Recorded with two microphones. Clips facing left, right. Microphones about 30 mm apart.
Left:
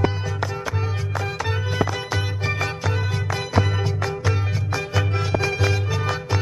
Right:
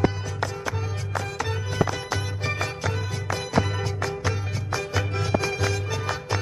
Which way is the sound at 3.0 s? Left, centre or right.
Left.